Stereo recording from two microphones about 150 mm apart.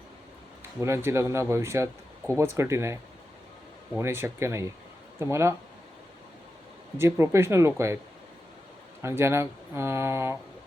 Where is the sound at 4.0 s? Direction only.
15° right (ahead or behind).